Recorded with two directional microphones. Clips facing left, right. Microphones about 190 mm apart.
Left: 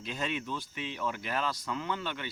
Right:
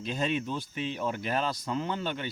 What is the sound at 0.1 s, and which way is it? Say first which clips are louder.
Speech: right 5 dB; 30° right (ahead or behind).